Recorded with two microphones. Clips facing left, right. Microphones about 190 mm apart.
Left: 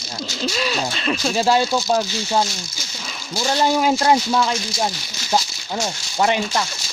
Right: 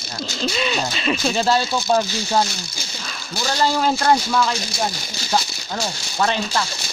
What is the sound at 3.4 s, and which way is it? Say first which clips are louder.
Speech: left 2 dB; 15° left (ahead or behind).